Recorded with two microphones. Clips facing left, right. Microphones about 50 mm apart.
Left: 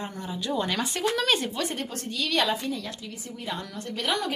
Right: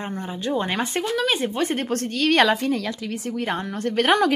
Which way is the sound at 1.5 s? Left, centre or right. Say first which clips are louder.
Right 7 dB; right.